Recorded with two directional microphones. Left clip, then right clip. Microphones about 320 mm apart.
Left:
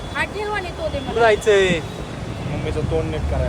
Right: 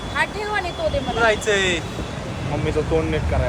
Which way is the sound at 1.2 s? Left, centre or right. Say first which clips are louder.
Left 4 dB; left.